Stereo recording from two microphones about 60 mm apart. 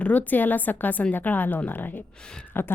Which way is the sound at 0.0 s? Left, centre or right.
Left.